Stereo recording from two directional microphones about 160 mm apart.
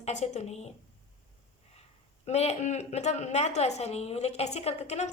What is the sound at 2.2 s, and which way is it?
A woman's voice, 45° left (ahead or behind).